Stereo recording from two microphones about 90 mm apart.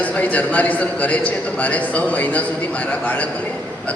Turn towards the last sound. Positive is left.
turn(degrees=15)  # may be behind; listen again after turning